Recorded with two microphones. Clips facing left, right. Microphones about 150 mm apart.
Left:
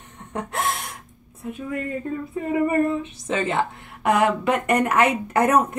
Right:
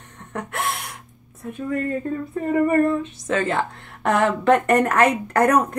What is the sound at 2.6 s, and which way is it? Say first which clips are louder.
A woman's voice: right 3 dB; 15° left (ahead or behind).